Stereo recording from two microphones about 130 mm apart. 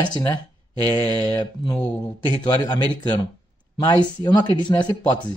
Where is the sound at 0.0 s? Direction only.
30° left (ahead or behind).